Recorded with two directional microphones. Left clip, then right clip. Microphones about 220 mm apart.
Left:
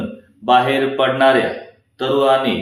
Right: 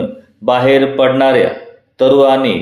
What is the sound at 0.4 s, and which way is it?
Speech, 35° right (ahead or behind).